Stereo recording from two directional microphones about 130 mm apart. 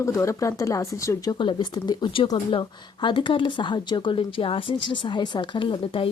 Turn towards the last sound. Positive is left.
turn(degrees=40)  # may be behind; listen again after turning